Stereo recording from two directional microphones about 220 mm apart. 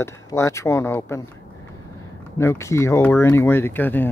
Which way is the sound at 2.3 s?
10° left (ahead or behind).